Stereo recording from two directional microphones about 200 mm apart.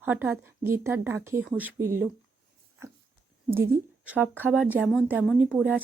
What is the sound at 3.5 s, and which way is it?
Speech, 10° right (ahead or behind).